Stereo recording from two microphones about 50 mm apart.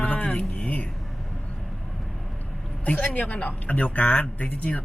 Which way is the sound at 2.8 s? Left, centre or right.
Left.